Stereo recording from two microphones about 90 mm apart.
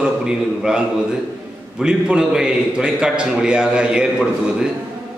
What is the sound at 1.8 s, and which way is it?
A man's voice, 10° right (ahead or behind).